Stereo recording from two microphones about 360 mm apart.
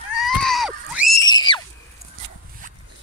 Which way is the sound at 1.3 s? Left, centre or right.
Centre.